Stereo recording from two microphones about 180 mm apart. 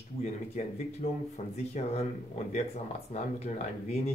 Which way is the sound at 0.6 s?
45° left (ahead or behind).